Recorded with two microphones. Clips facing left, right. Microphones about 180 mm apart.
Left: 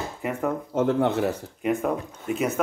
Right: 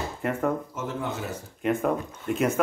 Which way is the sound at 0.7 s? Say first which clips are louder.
Left 10 dB; 60° left (ahead or behind).